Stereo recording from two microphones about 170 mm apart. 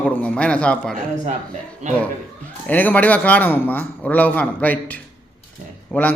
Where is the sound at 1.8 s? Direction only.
45° right (ahead or behind).